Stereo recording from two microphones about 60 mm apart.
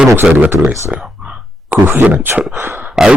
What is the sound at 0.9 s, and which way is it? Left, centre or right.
Speech, right.